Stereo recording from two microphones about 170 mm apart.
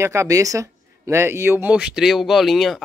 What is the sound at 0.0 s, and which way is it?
Speech, 15° right (ahead or behind).